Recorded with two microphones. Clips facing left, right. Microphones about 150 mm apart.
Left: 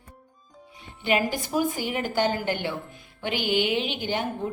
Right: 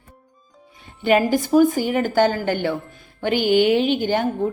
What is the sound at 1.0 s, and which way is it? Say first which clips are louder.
A woman's voice: right 8 dB; 45° right (ahead or behind).